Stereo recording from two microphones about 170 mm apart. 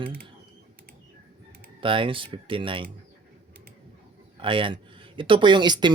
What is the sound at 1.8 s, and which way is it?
Speech, 30° right (ahead or behind).